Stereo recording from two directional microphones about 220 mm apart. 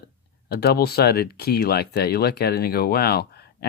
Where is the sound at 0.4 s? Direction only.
45° left (ahead or behind).